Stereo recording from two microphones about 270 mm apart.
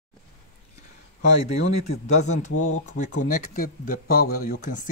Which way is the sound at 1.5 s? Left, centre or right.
Left.